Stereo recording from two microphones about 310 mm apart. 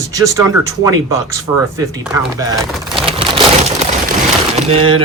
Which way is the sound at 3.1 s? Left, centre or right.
Centre.